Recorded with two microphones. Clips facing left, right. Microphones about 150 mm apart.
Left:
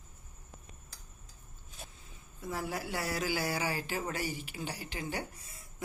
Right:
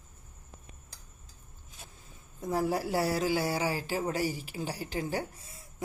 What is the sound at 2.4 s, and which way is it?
Speech, 35° right (ahead or behind).